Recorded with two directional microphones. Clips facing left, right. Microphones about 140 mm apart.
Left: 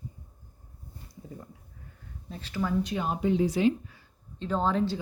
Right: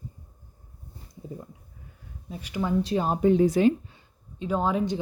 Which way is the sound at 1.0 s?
20° right (ahead or behind).